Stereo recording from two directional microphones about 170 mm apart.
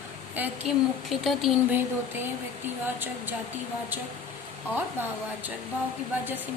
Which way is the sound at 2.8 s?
10° right (ahead or behind).